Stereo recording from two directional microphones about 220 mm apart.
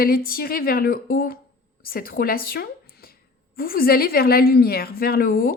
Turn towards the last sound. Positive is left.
turn(degrees=40)  # may be behind; listen again after turning